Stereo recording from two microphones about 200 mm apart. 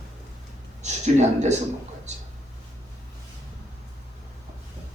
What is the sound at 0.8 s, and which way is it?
Speech, 35° right (ahead or behind).